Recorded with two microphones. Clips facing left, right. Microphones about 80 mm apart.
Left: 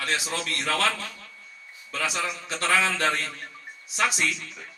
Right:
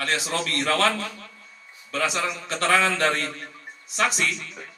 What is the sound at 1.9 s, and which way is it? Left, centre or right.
A man's voice, right.